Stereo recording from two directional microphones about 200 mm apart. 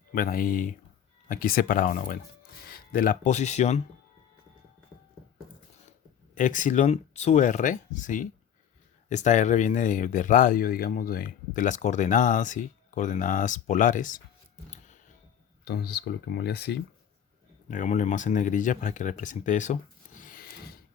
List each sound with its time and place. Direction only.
0.1 s speech: 45° left (ahead or behind)
6.3 s speech: 40° left (ahead or behind)
15.6 s speech: 55° left (ahead or behind)
17.7 s speech: 40° left (ahead or behind)